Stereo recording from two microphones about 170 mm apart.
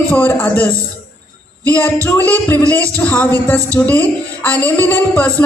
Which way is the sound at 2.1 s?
10° left (ahead or behind).